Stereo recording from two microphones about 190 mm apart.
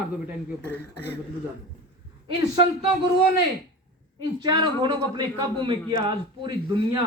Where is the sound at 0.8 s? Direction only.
60° left (ahead or behind).